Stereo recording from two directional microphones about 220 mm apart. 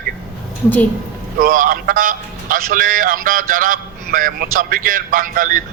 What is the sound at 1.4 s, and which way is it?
A man's voice, 40° right (ahead or behind).